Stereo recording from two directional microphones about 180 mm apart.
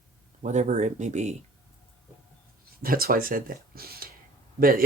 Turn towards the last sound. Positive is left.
turn(degrees=-55)  # may be behind; listen again after turning